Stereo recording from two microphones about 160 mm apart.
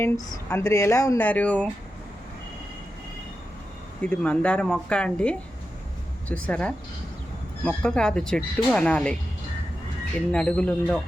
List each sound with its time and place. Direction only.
0.0 s speech: 15° left (ahead or behind)
1.2 s speech: 10° left (ahead or behind)
4.0 s speech: 5° left (ahead or behind)
10.3 s speech: 5° left (ahead or behind)